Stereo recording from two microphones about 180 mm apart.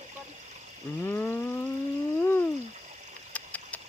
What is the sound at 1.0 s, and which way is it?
Speech, 10° left (ahead or behind).